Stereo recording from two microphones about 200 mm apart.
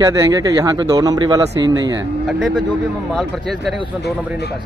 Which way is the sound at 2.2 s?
Centre (ahead or behind).